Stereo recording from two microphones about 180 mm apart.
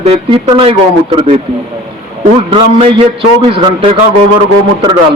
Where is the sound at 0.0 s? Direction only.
30° right (ahead or behind).